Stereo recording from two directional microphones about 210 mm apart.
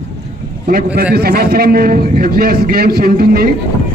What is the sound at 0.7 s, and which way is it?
A man's voice, 45° right (ahead or behind).